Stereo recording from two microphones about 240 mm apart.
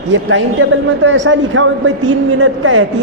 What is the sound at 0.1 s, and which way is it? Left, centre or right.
A woman's voice, right.